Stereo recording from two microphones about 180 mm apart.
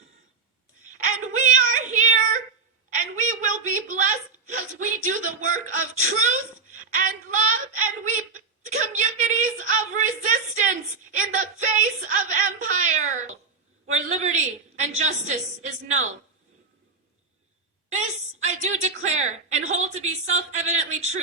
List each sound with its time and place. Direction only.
0.9 s child singing: 45° right (ahead or behind)
2.9 s a sound: 50° right (ahead or behind)
4.4 s a woman's voice: 45° right (ahead or behind)
18.3 s a woman's voice: 40° right (ahead or behind)